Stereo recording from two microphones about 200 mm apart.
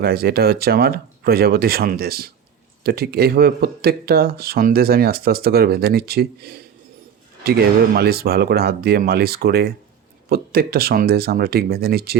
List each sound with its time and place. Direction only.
0.0 s speech: 50° right (ahead or behind)